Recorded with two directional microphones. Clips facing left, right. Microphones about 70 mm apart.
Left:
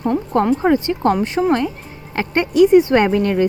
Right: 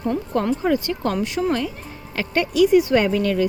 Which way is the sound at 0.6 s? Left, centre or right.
Left.